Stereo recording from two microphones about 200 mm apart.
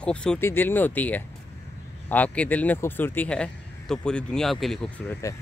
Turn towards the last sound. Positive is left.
turn(degrees=5)  # may be behind; listen again after turning